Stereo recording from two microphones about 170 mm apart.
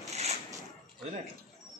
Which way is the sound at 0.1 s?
40° right (ahead or behind).